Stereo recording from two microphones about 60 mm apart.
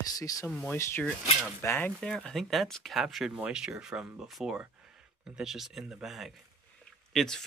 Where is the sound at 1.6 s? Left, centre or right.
Left.